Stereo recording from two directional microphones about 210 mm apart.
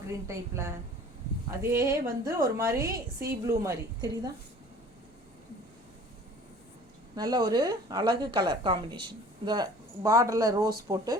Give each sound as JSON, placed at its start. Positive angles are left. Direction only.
{"t": 0.3, "sound": "speech", "side_deg": -15}
{"t": 7.2, "sound": "a woman's voice", "side_deg": -20}